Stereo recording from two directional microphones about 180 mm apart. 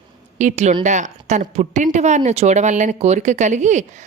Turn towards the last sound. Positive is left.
turn(degrees=-40)  # may be behind; listen again after turning